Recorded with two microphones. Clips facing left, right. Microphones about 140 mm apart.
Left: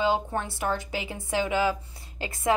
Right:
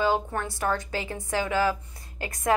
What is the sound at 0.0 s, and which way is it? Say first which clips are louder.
A woman's voice: even; 20° left (ahead or behind).